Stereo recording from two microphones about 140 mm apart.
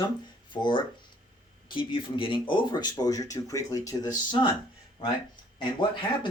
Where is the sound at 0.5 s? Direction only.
35° left (ahead or behind).